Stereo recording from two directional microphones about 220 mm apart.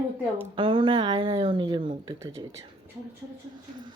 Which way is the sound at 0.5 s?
25° right (ahead or behind).